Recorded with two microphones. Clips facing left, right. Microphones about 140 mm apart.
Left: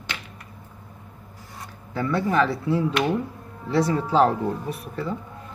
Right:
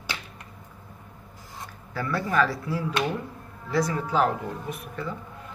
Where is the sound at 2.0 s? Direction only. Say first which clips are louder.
Left 3 dB; 20° left (ahead or behind).